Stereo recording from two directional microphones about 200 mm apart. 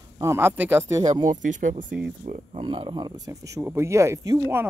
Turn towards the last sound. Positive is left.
turn(degrees=-15)  # may be behind; listen again after turning